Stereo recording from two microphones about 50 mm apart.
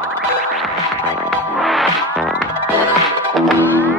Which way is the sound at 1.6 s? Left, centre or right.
Centre.